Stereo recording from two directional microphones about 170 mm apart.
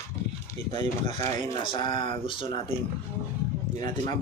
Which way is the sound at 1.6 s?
30° left (ahead or behind).